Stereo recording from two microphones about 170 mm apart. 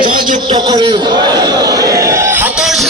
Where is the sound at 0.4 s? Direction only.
25° right (ahead or behind).